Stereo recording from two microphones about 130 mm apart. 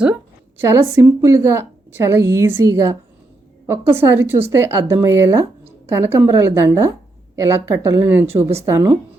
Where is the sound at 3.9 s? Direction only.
20° right (ahead or behind).